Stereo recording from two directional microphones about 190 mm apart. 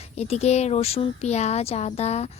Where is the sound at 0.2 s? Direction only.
35° left (ahead or behind).